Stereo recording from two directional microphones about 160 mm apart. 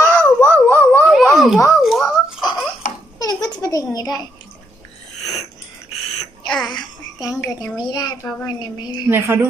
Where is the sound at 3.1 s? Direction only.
25° left (ahead or behind).